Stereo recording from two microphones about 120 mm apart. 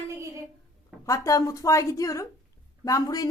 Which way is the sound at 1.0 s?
25° left (ahead or behind).